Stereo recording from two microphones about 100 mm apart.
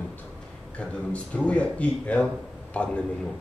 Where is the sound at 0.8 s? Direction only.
10° left (ahead or behind).